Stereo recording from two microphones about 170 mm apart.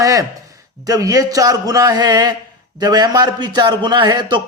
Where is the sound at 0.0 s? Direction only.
20° right (ahead or behind).